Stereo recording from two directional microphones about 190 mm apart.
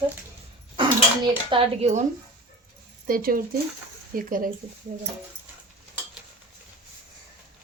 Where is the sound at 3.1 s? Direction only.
50° right (ahead or behind).